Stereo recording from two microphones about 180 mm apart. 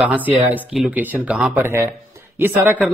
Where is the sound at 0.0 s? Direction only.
10° right (ahead or behind).